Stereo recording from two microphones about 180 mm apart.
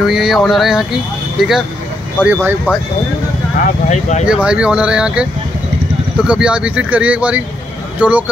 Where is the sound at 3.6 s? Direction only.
40° left (ahead or behind).